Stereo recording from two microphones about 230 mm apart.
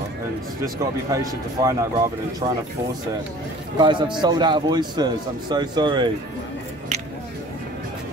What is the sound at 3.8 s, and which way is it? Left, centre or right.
A man's voice, centre.